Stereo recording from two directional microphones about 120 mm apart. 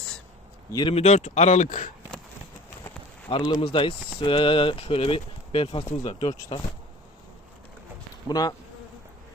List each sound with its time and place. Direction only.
0.9 s speech: 60° left (ahead or behind); by 1.9 s 90° left
3.2 s speech: 45° left (ahead or behind); by 6.3 s 65° left (ahead or behind)
8.3 s bee: 35° left (ahead or behind)